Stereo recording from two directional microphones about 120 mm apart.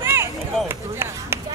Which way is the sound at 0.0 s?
20° right (ahead or behind).